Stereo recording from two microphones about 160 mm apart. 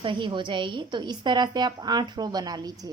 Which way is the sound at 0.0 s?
30° right (ahead or behind).